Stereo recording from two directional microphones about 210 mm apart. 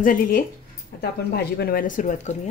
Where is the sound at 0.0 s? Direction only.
40° left (ahead or behind).